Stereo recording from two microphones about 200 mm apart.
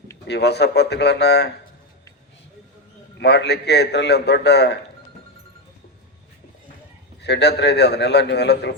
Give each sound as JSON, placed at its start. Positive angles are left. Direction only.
{"t": 0.3, "sound": "a man's voice", "side_deg": 55}
{"t": 3.2, "sound": "a man's voice", "side_deg": 60}
{"t": 7.2, "sound": "a man's voice", "side_deg": 60}